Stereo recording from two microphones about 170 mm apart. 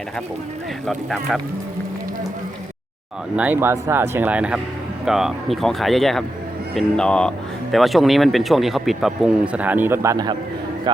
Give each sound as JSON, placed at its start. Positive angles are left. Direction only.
{"t": 0.9, "sound": "speech", "side_deg": 0}
{"t": 3.3, "sound": "speech", "side_deg": -10}